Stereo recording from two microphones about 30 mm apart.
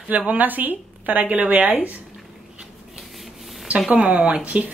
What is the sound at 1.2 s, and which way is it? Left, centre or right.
Speech, right.